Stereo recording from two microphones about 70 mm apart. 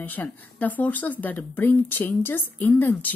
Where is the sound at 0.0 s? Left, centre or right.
Left.